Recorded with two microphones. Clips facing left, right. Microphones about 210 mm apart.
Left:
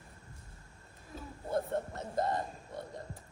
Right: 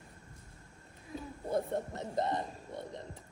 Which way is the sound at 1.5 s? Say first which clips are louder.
Even; 20° right (ahead or behind).